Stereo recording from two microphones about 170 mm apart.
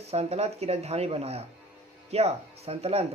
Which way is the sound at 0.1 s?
35° right (ahead or behind).